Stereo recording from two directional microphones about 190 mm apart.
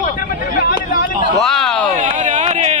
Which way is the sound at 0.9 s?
50° left (ahead or behind).